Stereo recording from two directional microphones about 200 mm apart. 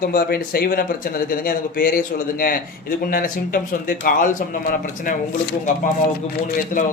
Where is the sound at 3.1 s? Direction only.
45° left (ahead or behind).